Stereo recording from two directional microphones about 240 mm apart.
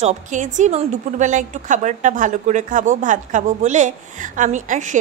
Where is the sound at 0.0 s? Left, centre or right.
Right.